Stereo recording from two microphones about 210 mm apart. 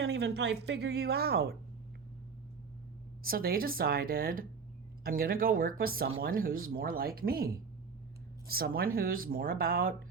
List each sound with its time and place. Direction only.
0.0 s a woman's voice: 50° right (ahead or behind)
3.2 s a woman's voice: 45° right (ahead or behind)